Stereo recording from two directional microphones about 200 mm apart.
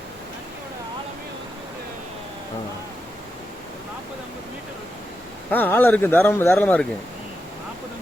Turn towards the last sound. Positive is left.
turn(degrees=5)  # may be behind; listen again after turning